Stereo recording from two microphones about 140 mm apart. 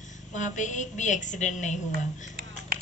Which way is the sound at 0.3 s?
60° left (ahead or behind).